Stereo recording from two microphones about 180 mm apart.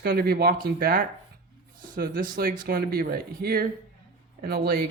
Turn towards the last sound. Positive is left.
turn(degrees=-55)  # may be behind; listen again after turning